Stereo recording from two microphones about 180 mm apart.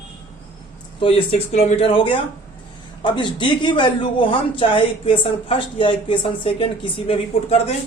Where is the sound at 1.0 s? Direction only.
30° left (ahead or behind).